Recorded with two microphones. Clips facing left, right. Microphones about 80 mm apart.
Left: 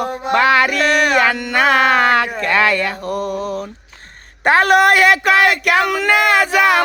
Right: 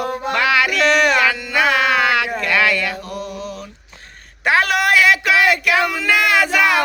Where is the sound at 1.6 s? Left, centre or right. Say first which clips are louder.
Left 3 dB; left.